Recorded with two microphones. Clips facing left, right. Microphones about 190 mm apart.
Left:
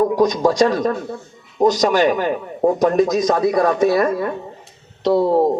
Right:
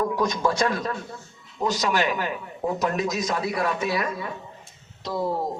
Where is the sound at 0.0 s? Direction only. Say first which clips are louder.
Left 8 dB; 35° left (ahead or behind); by 4.4 s 60° left (ahead or behind).